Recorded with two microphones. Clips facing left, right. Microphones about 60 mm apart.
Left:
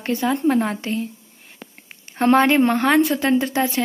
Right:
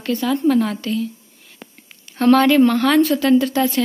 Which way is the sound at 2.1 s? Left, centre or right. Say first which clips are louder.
Right 2 dB; left.